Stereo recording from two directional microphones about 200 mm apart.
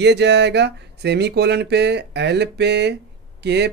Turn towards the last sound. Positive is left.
turn(degrees=-55)  # may be behind; listen again after turning